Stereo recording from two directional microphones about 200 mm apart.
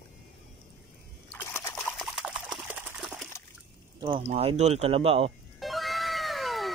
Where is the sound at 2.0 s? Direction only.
Centre (ahead or behind).